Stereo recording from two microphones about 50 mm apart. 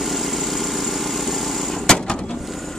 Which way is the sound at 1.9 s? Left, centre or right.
Centre.